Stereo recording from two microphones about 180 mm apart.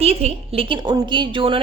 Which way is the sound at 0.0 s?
35° right (ahead or behind).